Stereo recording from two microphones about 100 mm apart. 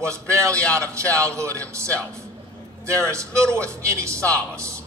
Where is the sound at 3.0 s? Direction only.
30° right (ahead or behind).